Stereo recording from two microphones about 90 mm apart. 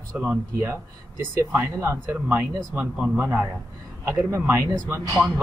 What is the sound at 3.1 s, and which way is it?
Speech, 25° right (ahead or behind).